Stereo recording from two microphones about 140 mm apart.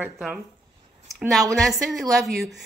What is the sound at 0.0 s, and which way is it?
Speech, 5° right (ahead or behind).